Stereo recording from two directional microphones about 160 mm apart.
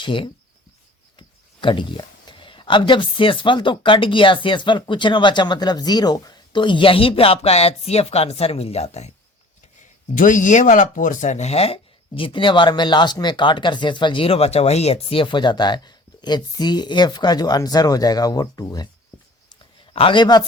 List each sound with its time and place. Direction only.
0.0 s speech: 30° left (ahead or behind)
1.6 s speech: 30° left (ahead or behind)
10.2 s speech: 55° left (ahead or behind); by 18.9 s 25° left (ahead or behind)
19.9 s speech: 35° left (ahead or behind)